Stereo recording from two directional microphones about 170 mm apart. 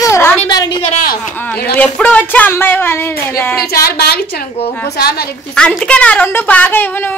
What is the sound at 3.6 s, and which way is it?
A woman's voice, 70° left (ahead or behind).